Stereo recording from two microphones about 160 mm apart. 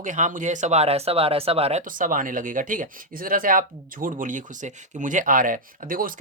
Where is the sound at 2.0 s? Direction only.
55° right (ahead or behind).